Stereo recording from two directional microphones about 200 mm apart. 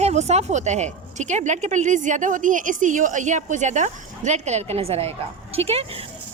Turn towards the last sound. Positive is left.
turn(degrees=-30)  # may be behind; listen again after turning